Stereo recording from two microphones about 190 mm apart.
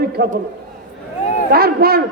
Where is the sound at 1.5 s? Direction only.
55° right (ahead or behind).